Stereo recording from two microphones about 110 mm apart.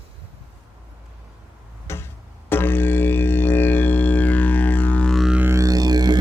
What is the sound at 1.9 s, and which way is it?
Music, 25° left (ahead or behind).